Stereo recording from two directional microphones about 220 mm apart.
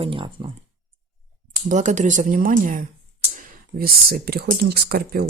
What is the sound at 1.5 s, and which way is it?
Speech, 35° right (ahead or behind).